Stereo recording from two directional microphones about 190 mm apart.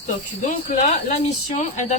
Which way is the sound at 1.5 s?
40° left (ahead or behind).